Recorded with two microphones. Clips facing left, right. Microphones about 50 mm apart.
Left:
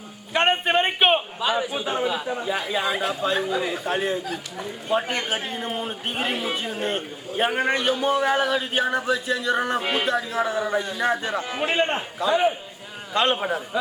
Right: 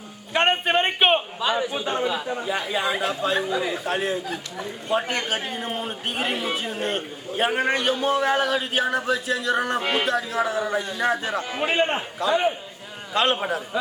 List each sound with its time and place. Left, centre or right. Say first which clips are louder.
0.3 s a man's voice: even; centre